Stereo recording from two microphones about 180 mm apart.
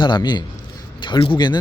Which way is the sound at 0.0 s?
25° left (ahead or behind).